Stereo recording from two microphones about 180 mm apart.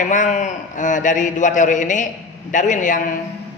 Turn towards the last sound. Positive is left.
turn(degrees=45)  # may be behind; listen again after turning